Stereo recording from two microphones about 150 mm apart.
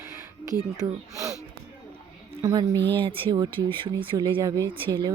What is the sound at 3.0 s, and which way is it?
Speech, 35° right (ahead or behind).